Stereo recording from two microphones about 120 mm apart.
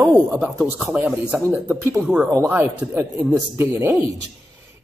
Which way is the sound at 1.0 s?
20° right (ahead or behind).